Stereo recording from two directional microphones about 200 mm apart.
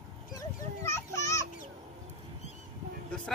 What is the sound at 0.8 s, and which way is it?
Speech, 15° left (ahead or behind).